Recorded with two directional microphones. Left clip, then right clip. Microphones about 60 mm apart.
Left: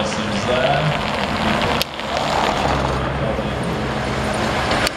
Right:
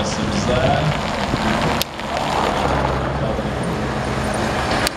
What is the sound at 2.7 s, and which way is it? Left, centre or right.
Vehicle, left.